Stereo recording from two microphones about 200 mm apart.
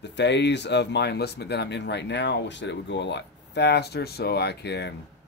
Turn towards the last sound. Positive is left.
turn(degrees=55)  # may be behind; listen again after turning